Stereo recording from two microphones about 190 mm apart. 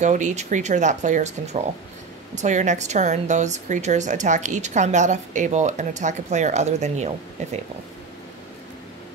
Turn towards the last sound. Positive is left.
turn(degrees=-35)  # may be behind; listen again after turning